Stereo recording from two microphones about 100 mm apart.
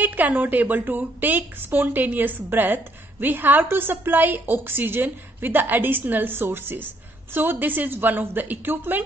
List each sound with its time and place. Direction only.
0.0 s a woman's voice: 20° right (ahead or behind)